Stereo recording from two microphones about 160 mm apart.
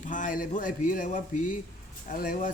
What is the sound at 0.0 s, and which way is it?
Speech, 55° left (ahead or behind).